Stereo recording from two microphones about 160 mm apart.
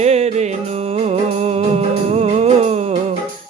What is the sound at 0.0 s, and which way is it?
Music, 45° right (ahead or behind).